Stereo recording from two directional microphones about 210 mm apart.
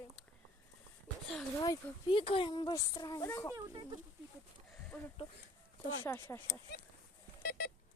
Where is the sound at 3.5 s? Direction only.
20° right (ahead or behind).